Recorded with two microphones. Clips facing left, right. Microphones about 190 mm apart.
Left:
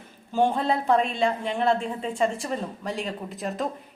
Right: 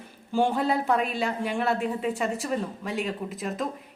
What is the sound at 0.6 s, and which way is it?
A woman's voice, 5° right (ahead or behind).